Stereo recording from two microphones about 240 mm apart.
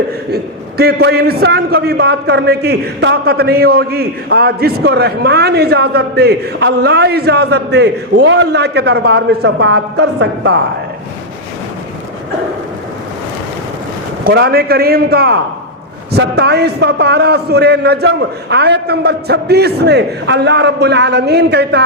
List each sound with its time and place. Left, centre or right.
0.8 s a man's voice: right
14.3 s a man's voice: right